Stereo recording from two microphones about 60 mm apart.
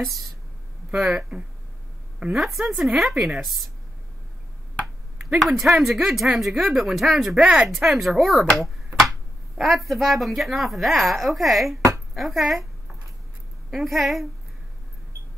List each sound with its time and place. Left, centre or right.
0.9 s a woman's voice: centre
2.3 s a woman's voice: centre
5.3 s a woman's voice: centre
8.6 s finger snapping: centre
9.6 s a woman's voice: centre
13.7 s a woman's voice: centre